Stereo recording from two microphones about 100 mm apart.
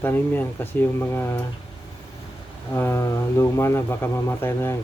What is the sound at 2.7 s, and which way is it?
Speech, 25° left (ahead or behind).